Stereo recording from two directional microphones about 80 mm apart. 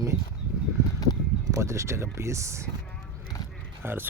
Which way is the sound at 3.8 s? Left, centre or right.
Right.